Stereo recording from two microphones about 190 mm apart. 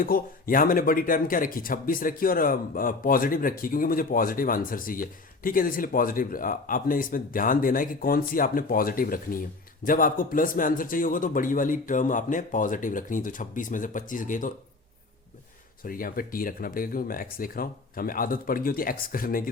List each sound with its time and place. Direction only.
0.0 s speech: 50° left (ahead or behind)
15.8 s speech: 50° left (ahead or behind)